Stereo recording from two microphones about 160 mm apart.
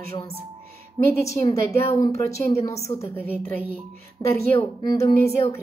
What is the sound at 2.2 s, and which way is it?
A woman's voice, 20° left (ahead or behind).